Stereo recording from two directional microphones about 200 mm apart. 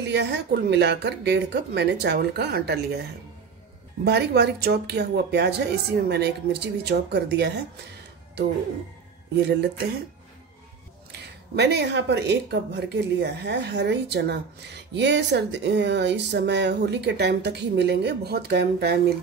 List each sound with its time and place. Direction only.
0.0 s speech: 55° right (ahead or behind)
4.0 s speech: 55° right (ahead or behind)
11.1 s speech: 55° right (ahead or behind)